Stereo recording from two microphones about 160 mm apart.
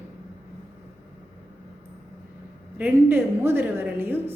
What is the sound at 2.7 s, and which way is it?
A man's voice, 10° right (ahead or behind).